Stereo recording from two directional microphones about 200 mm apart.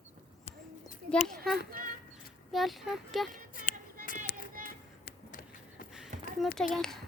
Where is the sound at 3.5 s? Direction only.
45° left (ahead or behind).